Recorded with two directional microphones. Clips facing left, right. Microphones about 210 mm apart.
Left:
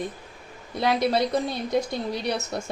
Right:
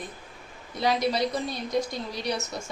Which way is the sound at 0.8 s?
55° left (ahead or behind).